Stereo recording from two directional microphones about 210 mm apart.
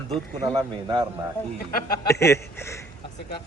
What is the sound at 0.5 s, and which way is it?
Speech, 20° right (ahead or behind).